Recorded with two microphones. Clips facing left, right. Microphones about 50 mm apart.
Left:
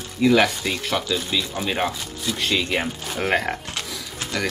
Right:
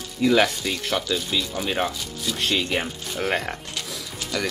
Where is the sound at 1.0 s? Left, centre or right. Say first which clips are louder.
Left 1 dB; left.